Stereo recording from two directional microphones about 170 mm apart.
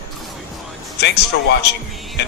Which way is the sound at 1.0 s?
85° left.